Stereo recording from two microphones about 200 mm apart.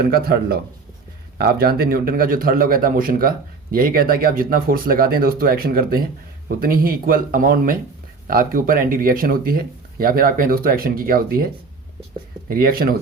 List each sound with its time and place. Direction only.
0.0 s a man's voice: 50° right (ahead or behind)
12.5 s a man's voice: 45° right (ahead or behind)